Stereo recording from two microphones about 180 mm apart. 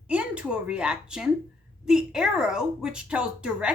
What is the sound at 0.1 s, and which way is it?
A woman's voice, 5° right (ahead or behind).